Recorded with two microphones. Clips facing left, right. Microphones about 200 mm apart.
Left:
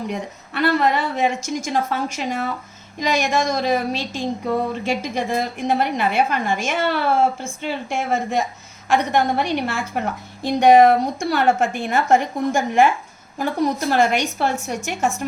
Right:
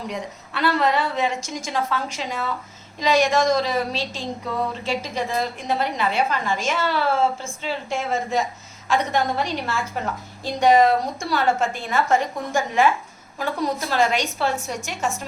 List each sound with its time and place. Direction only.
0.1 s a woman's voice: 55° left (ahead or behind)